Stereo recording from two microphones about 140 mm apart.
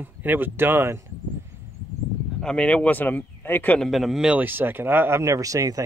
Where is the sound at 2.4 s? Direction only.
5° left (ahead or behind).